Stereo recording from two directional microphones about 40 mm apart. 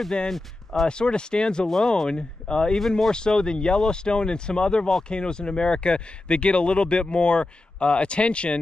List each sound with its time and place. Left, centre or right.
0.3 s speech: centre
0.8 s speech: left